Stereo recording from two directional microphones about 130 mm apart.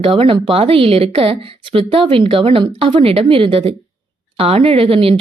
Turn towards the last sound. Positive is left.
turn(degrees=-45)  # may be behind; listen again after turning